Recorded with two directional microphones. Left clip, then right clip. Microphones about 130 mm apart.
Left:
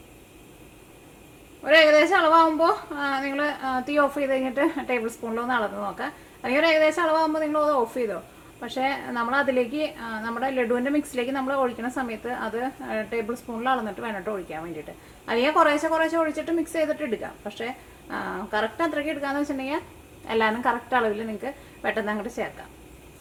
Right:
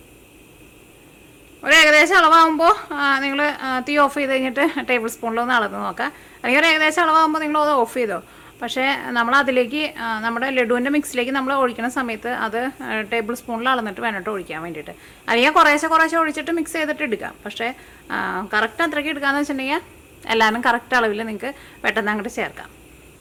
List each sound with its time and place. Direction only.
1.6 s a woman's voice: 40° right (ahead or behind)